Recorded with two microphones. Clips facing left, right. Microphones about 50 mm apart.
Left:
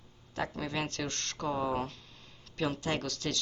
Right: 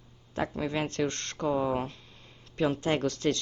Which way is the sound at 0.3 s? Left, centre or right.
Right.